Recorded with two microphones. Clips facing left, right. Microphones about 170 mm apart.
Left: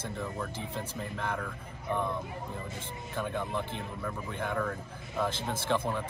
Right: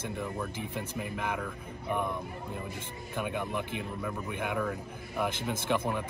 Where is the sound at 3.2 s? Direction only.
15° right (ahead or behind).